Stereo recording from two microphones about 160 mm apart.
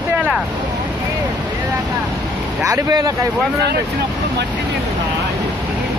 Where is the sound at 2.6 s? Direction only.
20° right (ahead or behind).